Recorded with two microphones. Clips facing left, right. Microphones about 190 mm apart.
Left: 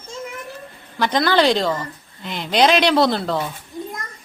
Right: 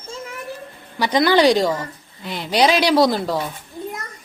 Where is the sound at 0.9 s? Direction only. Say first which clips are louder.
Right 2 dB; 10° right (ahead or behind).